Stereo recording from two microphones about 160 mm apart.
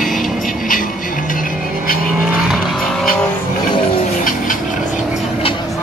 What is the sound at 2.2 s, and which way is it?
Vehicle, centre (ahead or behind).